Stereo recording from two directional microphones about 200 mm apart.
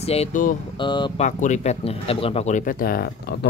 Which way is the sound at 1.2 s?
35° left (ahead or behind).